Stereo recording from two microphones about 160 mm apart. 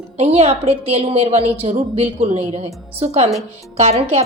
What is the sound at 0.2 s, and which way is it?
A woman's voice, 40° right (ahead or behind).